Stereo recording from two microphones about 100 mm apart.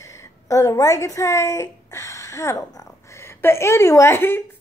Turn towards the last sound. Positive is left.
turn(degrees=25)  # may be behind; listen again after turning